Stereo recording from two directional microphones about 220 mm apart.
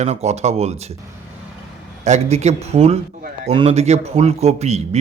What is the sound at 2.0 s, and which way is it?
A man's voice, 30° right (ahead or behind).